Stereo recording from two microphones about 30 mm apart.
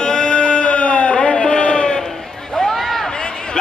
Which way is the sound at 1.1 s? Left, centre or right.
Left.